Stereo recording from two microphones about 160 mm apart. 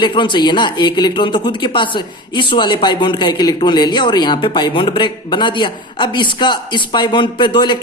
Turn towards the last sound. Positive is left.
turn(degrees=30)  # may be behind; listen again after turning